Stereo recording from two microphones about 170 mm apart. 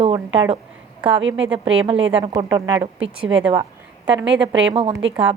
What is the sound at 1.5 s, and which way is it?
A woman's voice, 35° right (ahead or behind).